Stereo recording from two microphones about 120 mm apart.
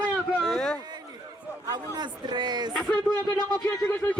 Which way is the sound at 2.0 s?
40° right (ahead or behind).